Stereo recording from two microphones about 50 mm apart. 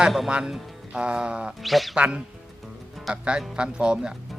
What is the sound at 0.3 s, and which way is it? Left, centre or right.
Music, right.